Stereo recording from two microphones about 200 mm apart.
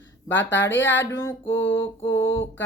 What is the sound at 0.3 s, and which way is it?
Speech, 65° left (ahead or behind).